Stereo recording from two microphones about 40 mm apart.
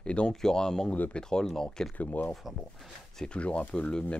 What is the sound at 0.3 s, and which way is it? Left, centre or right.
Speech, centre.